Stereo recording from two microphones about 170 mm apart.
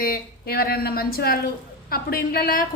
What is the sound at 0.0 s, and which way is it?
A woman's voice, 60° left (ahead or behind).